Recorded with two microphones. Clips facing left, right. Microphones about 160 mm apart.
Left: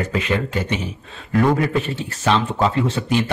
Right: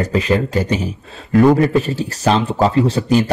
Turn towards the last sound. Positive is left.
turn(degrees=-40)  # may be behind; listen again after turning